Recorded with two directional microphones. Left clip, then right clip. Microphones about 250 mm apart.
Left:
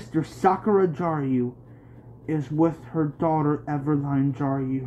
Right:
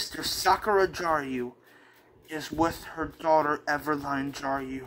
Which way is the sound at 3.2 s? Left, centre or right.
Centre.